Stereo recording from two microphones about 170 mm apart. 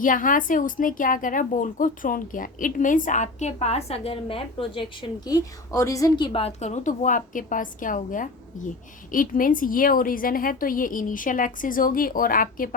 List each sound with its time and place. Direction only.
0.0 s a woman's voice: 50° left (ahead or behind)